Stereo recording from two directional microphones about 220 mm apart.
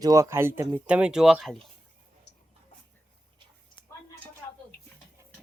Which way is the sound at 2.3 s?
50° left (ahead or behind).